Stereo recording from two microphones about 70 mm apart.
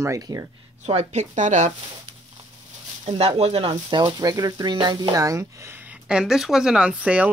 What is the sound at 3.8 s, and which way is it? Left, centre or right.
Speech, right.